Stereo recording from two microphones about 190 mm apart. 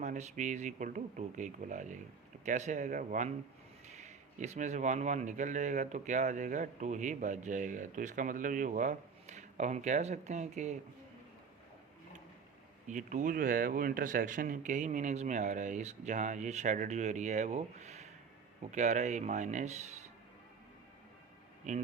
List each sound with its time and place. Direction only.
0.0 s speech: 40° right (ahead or behind)
12.9 s speech: 40° right (ahead or behind)
21.7 s speech: 40° right (ahead or behind)